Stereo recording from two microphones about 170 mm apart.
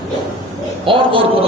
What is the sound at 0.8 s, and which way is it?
Speech, 30° right (ahead or behind).